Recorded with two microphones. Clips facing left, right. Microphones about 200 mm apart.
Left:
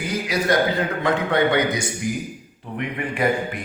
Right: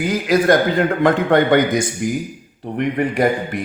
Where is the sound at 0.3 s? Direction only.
50° right (ahead or behind).